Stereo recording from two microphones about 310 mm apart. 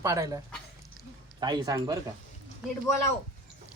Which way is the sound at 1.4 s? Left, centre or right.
Centre.